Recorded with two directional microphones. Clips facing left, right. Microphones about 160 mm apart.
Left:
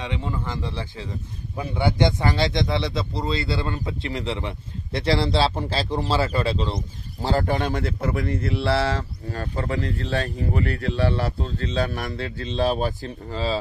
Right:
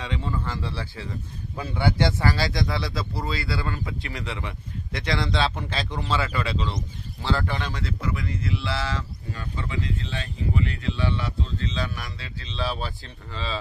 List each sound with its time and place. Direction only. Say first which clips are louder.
0.0 s speech: left 1 dB; 15° left (ahead or behind); by 13.6 s 40° left (ahead or behind)